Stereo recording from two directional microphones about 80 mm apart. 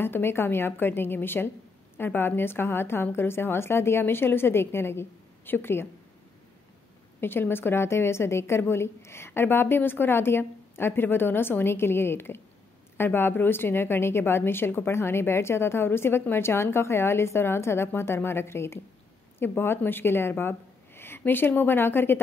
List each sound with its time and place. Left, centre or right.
0.0 s a woman's voice: left
7.2 s a woman's voice: left